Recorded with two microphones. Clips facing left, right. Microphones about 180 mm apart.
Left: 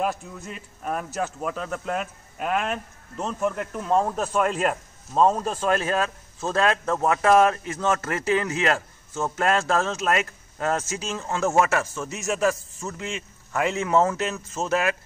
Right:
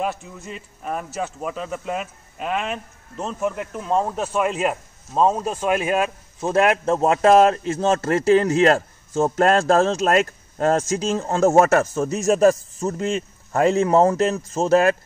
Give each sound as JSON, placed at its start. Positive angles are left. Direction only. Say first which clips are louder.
{"t": 0.0, "sound": "speech", "louder": "right 1 dB", "side_deg": 0}